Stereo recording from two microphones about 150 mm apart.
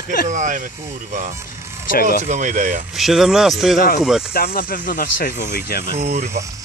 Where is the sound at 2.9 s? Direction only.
Centre (ahead or behind).